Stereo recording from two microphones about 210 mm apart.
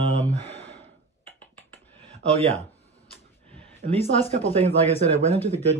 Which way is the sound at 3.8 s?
45° right (ahead or behind).